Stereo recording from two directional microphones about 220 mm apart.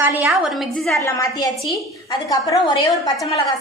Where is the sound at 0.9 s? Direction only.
15° left (ahead or behind).